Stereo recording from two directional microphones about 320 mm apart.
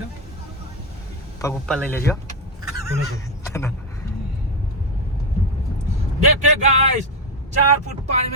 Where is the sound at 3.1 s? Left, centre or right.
Centre.